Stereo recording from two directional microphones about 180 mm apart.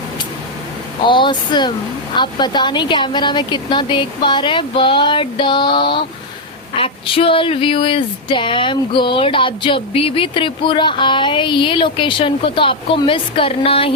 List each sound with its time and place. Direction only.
1.0 s speech: 25° left (ahead or behind)